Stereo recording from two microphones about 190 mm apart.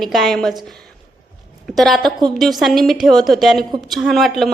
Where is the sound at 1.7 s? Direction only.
Centre (ahead or behind).